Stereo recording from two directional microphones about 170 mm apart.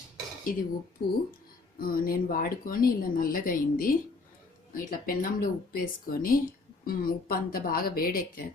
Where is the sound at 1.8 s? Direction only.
55° left (ahead or behind).